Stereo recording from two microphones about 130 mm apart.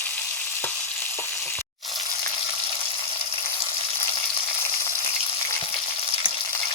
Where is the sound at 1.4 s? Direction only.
15° left (ahead or behind).